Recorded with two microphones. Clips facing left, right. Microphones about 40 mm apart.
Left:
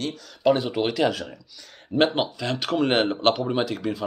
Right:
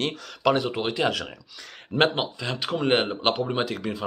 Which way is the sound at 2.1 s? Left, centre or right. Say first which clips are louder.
Left 3 dB; centre.